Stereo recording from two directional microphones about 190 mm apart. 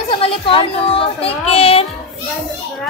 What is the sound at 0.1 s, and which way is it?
Speech, 30° left (ahead or behind).